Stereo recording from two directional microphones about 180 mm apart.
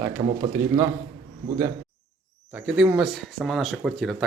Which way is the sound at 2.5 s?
5° right (ahead or behind).